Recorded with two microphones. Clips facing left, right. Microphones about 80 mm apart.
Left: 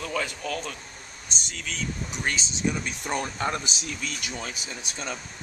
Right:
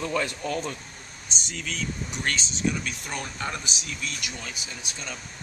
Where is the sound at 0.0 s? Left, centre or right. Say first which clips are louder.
Right 2 dB; centre.